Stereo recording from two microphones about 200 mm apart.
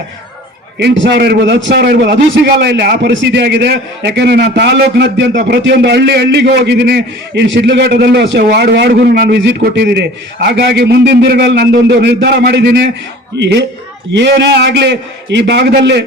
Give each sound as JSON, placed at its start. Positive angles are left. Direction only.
{"t": 0.8, "sound": "a man's voice", "side_deg": -60}